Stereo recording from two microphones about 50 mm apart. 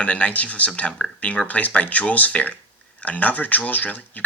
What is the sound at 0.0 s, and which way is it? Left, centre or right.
Speech, left.